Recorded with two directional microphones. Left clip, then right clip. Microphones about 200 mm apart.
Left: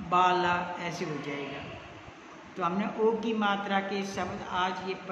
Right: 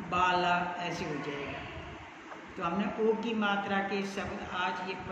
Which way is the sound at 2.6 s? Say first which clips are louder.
Left 4 dB; 55° left (ahead or behind).